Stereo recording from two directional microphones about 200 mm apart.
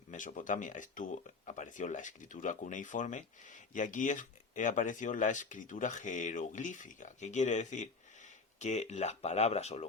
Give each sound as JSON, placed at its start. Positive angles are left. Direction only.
{"t": 0.1, "sound": "speech", "side_deg": 40}